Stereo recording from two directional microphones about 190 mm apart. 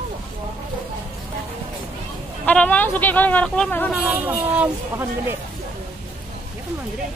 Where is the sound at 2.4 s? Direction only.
10° left (ahead or behind).